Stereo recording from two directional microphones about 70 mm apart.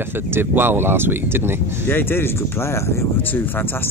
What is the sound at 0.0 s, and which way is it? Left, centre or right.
Speech, right.